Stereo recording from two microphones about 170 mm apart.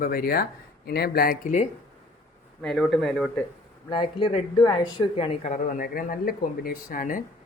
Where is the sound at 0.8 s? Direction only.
70° left (ahead or behind); by 1.6 s 50° left (ahead or behind).